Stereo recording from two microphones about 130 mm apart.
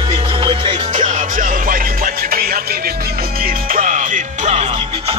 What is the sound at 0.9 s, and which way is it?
Music, 70° right (ahead or behind).